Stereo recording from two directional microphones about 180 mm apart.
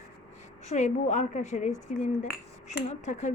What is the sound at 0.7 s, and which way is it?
A woman's voice, 40° left (ahead or behind).